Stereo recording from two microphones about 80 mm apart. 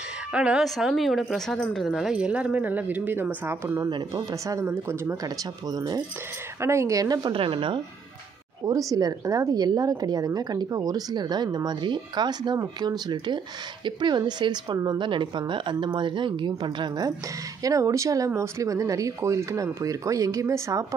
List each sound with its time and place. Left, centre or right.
0.3 s speech: centre
1.9 s speech: centre
3.4 s speech: right
3.9 s a woman's voice: right
4.6 s speech: right
5.2 s a woman's voice: right
6.6 s speech: right
7.2 s speech: right
8.6 s a woman's voice: right
15.0 s speech: right
17.6 s a woman's voice: right